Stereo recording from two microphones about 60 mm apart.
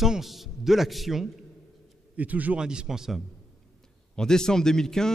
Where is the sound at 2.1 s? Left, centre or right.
Right.